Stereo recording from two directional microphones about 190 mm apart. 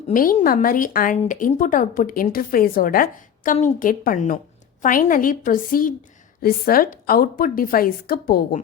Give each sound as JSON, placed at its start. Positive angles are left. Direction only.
{"t": 0.1, "sound": "speech", "side_deg": 45}